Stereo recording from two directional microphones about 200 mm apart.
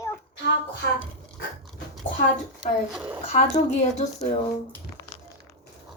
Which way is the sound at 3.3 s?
35° left (ahead or behind).